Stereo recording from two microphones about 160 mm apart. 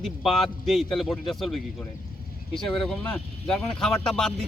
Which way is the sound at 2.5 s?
5° left (ahead or behind).